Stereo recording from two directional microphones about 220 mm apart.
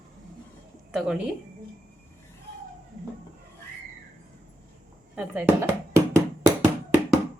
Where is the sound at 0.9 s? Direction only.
5° right (ahead or behind).